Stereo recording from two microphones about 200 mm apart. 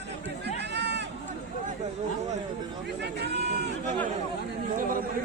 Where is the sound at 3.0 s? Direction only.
55° right (ahead or behind).